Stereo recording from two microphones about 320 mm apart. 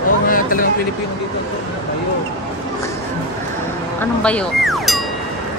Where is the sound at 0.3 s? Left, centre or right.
Left.